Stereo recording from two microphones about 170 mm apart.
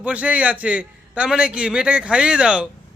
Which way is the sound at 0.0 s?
10° right (ahead or behind).